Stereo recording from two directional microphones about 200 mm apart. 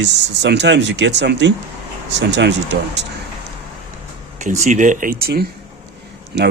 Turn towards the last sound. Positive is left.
turn(degrees=-55)  # may be behind; listen again after turning